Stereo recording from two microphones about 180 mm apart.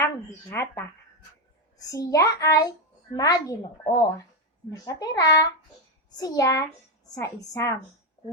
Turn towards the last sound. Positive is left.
turn(degrees=15)  # may be behind; listen again after turning